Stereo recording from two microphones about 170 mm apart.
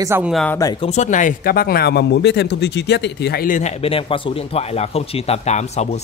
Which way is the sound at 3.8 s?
30° left (ahead or behind).